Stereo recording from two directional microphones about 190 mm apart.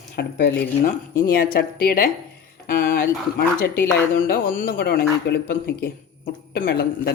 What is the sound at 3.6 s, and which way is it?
A man's voice, 50° left (ahead or behind).